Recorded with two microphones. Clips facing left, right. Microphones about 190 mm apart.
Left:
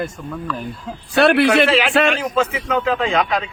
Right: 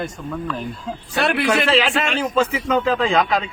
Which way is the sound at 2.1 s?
30° right (ahead or behind).